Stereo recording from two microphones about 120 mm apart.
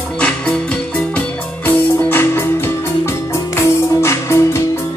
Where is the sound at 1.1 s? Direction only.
15° left (ahead or behind).